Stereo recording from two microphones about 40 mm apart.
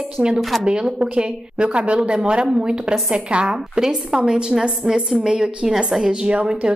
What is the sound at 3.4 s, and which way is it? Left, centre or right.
A woman's voice, centre.